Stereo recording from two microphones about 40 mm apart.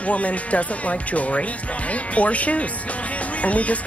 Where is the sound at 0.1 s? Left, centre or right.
Left.